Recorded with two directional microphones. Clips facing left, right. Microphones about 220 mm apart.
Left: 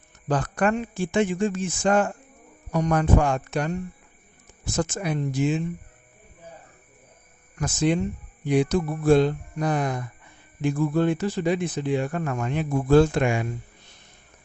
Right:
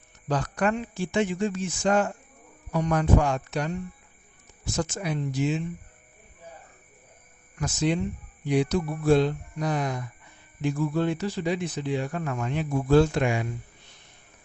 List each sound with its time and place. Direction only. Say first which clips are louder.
0.3 s speech: left 3 dB; 50° left (ahead or behind)
7.6 s speech: left 3 dB; 50° left (ahead or behind)